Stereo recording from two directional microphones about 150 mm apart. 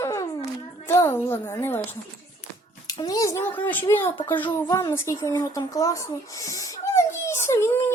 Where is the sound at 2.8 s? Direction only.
25° left (ahead or behind).